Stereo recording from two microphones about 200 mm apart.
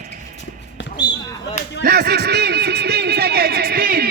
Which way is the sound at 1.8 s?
55° right (ahead or behind).